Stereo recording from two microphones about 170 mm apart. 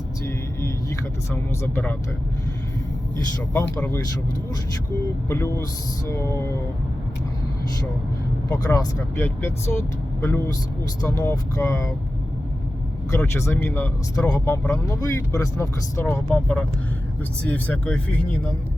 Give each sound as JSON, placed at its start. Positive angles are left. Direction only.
{"t": 0.3, "sound": "vehicle", "side_deg": 15}
{"t": 3.5, "sound": "speech", "side_deg": 10}
{"t": 5.3, "sound": "speech", "side_deg": 15}
{"t": 8.4, "sound": "speech", "side_deg": 20}
{"t": 13.1, "sound": "speech", "side_deg": 15}